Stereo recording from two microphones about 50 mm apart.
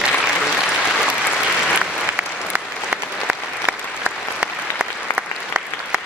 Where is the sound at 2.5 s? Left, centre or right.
Right.